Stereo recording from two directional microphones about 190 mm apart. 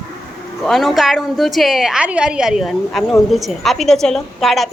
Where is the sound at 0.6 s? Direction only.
Centre (ahead or behind).